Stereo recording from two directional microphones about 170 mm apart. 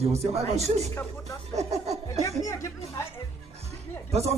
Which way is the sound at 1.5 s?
40° right (ahead or behind).